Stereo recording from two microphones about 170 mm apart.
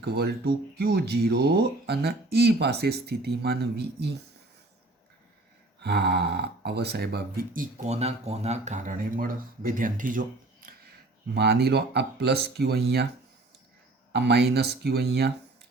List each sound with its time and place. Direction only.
0.0 s speech: 70° right (ahead or behind)
5.8 s speech: 75° right (ahead or behind); by 10.8 s 55° right (ahead or behind)
11.3 s speech: 75° right (ahead or behind)
14.1 s speech: 75° right (ahead or behind)